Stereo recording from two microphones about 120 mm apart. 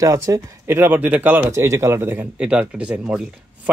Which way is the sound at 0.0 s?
25° right (ahead or behind).